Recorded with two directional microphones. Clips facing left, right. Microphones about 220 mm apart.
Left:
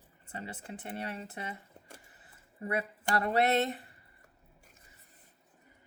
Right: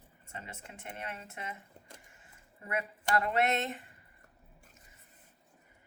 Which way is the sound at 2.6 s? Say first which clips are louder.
Left 2 dB; 35° left (ahead or behind).